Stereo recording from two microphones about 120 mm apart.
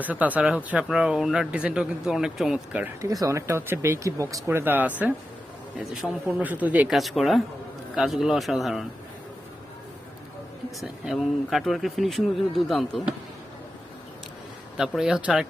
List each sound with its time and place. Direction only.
0.0 s speech: 15° right (ahead or behind)
3.0 s speech: 25° right (ahead or behind)
5.9 s speech: 5° right (ahead or behind)
6.9 s speech: centre (ahead or behind)
10.8 s speech: centre (ahead or behind)
14.8 s speech: 5° right (ahead or behind)